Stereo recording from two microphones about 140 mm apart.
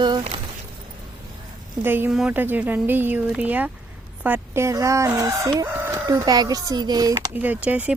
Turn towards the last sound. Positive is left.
turn(degrees=-10)  # may be behind; listen again after turning